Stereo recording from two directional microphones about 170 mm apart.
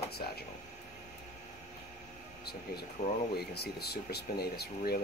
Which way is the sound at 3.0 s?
45° left (ahead or behind).